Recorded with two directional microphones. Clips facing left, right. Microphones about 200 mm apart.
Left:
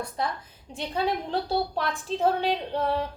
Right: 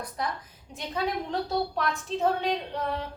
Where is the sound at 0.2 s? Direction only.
30° left (ahead or behind).